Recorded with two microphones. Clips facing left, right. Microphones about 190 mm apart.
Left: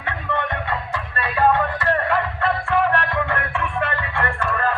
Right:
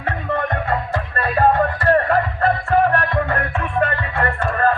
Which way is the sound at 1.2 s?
45° right (ahead or behind).